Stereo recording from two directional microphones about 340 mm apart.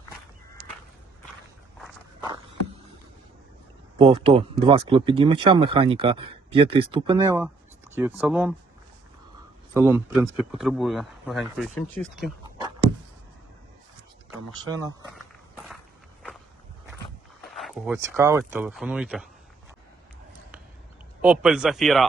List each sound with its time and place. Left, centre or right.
3.9 s speech: centre
9.7 s speech: centre
14.6 s speech: centre
17.5 s speech: centre
21.2 s speech: centre